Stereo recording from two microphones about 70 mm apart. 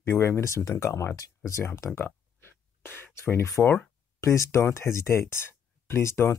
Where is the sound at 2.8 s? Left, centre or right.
Left.